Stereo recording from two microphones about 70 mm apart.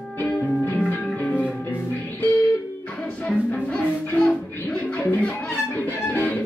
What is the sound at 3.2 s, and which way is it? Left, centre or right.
Music, centre.